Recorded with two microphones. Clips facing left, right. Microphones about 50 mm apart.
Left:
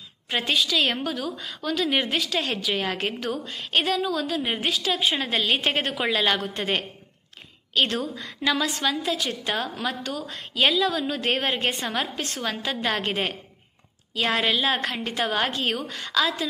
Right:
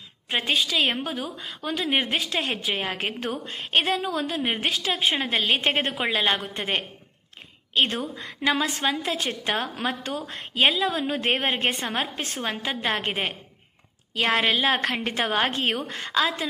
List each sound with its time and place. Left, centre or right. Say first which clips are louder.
0.4 s a woman's voice: even; right
14.1 s a woman's voice: right 1 dB; right